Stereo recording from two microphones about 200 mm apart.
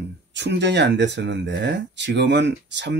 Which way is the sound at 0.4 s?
60° right (ahead or behind).